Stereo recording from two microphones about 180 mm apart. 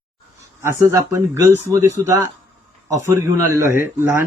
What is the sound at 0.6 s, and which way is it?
Speech, 15° right (ahead or behind).